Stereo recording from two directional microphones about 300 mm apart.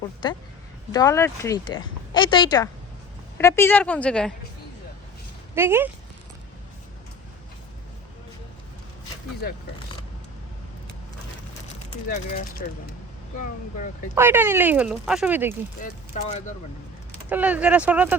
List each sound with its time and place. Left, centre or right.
0.2 s a woman's voice: centre
5.5 s speech: centre
9.4 s speech: left
12.0 s speech: left
14.2 s speech: centre
15.8 s speech: left
17.2 s a woman's voice: centre